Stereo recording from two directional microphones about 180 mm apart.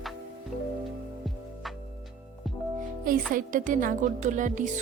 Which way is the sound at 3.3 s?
50° right (ahead or behind).